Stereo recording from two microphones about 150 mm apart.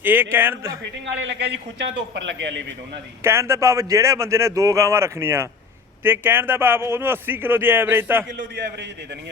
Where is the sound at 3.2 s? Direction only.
15° right (ahead or behind).